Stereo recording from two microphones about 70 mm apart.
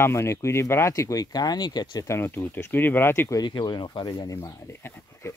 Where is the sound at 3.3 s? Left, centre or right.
Left.